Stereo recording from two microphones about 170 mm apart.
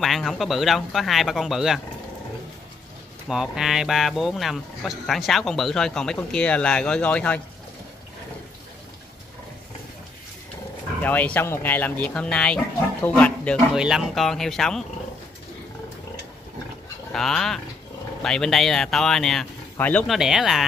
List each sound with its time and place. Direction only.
0.0 s speech: centre (ahead or behind)
3.3 s speech: 5° right (ahead or behind)
11.0 s speech: 10° left (ahead or behind)
13.7 s speech: 5° right (ahead or behind)
17.1 s speech: centre (ahead or behind)